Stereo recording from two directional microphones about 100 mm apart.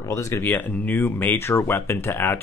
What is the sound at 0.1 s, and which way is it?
Speech, 30° left (ahead or behind).